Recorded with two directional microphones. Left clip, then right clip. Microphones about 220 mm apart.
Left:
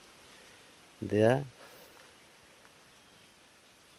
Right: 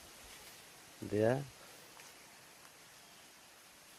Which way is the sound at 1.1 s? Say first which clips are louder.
Left 7 dB; 50° left (ahead or behind).